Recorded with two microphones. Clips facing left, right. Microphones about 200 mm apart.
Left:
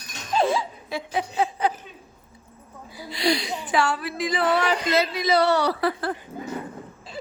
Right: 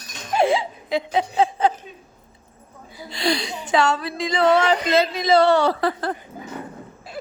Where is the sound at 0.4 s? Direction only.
15° right (ahead or behind).